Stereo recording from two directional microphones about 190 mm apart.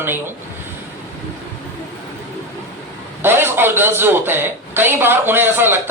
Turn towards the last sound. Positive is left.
turn(degrees=-10)  # may be behind; listen again after turning